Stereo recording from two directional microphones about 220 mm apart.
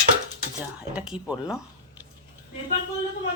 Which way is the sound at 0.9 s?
5° right (ahead or behind).